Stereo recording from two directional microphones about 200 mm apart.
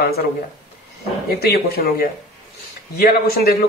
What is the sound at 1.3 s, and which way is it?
Speech, 50° left (ahead or behind).